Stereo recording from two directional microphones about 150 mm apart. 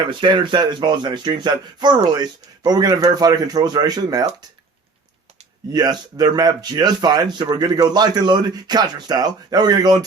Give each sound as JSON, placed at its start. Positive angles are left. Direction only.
{"t": 0.1, "sound": "speech", "side_deg": -30}
{"t": 5.7, "sound": "speech", "side_deg": -25}